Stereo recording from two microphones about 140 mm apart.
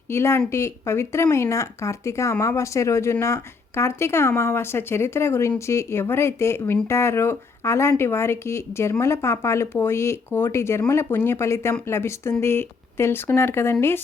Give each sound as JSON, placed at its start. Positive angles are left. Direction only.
{"t": 0.1, "sound": "speech", "side_deg": 20}